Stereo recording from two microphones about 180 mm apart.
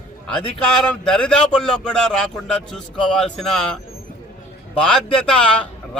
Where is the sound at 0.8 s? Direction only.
5° left (ahead or behind).